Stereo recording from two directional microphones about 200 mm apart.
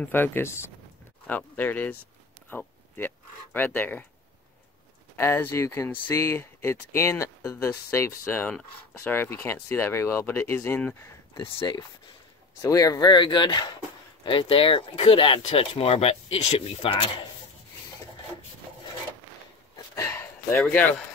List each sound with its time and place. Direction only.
0.0 s speech: 10° left (ahead or behind)
3.5 s speech: 10° left (ahead or behind)
5.1 s speech: 10° left (ahead or behind)
12.6 s speech: 15° left (ahead or behind)
20.0 s a sound: 15° left (ahead or behind)
20.5 s speech: 5° left (ahead or behind)